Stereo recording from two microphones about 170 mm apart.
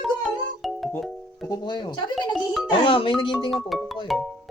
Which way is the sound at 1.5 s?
25° left (ahead or behind).